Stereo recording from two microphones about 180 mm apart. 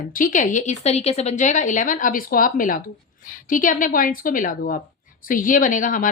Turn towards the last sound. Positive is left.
turn(degrees=45)  # may be behind; listen again after turning